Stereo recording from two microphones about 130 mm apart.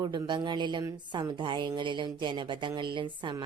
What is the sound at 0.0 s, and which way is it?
A woman's voice, 35° right (ahead or behind).